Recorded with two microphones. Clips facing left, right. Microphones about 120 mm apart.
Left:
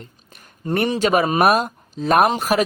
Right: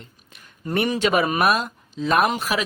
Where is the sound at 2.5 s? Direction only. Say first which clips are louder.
Left 6 dB; 50° left (ahead or behind).